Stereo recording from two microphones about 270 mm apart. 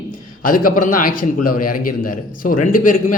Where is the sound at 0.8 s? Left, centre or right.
Left.